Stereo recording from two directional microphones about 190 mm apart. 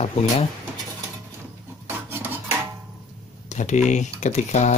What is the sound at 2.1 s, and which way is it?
Dishes, 10° right (ahead or behind).